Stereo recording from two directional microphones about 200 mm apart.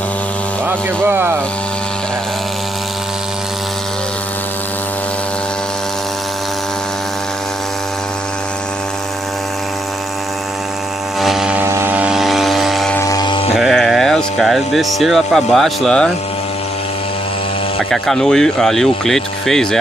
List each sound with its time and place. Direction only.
0.7 s speech: 10° right (ahead or behind)
11.1 s aircraft: centre (ahead or behind)
13.0 s a sound: 20° left (ahead or behind)
13.6 s speech: centre (ahead or behind)
17.8 s speech: centre (ahead or behind)